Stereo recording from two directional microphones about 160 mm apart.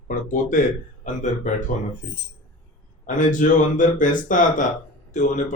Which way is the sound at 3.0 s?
55° left (ahead or behind).